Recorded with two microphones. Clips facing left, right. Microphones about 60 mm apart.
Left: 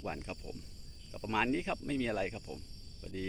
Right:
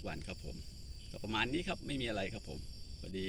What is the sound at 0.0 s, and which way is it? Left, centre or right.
Cricket, left.